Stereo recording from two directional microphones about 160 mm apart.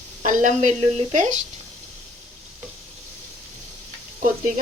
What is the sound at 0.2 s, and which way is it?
A woman's voice, 50° right (ahead or behind).